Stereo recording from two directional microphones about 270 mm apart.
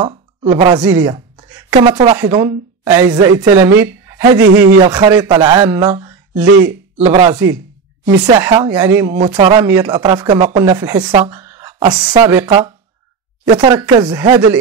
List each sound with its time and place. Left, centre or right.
0.0 s speech: centre
7.0 s speech: right
8.4 s speech: centre